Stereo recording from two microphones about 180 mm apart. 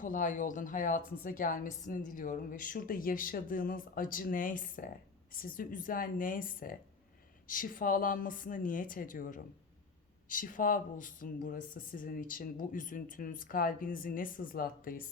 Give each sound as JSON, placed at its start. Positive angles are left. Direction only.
{"t": 0.0, "sound": "a woman's voice", "side_deg": 45}